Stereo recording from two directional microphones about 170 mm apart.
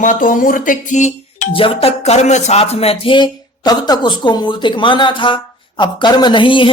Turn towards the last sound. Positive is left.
turn(degrees=30)  # may be behind; listen again after turning